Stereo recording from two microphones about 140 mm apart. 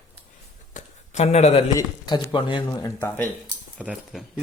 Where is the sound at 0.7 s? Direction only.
55° left (ahead or behind).